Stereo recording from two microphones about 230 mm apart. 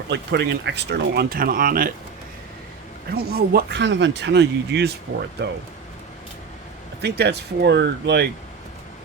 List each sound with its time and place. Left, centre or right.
0.1 s speech: right
3.1 s speech: right
7.0 s speech: right